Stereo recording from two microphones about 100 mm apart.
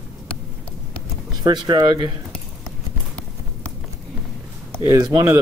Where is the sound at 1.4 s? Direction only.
45° right (ahead or behind).